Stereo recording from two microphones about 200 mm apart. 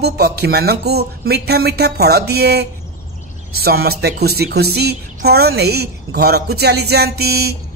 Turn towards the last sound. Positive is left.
turn(degrees=-50)  # may be behind; listen again after turning